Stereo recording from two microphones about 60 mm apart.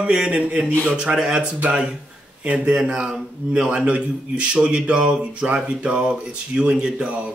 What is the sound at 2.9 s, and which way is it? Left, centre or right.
Speech, centre.